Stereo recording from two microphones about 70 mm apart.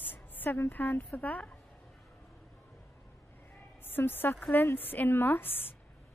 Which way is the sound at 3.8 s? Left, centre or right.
Left.